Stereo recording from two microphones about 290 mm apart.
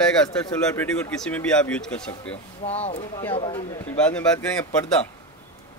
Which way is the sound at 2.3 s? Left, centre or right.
Centre.